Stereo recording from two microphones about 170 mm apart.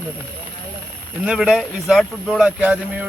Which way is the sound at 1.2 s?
5° right (ahead or behind).